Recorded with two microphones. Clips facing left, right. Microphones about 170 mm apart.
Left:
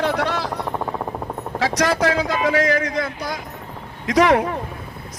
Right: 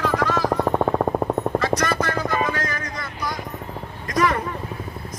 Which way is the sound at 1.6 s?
90° left.